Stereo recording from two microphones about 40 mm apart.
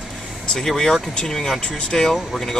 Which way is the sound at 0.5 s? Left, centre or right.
Centre.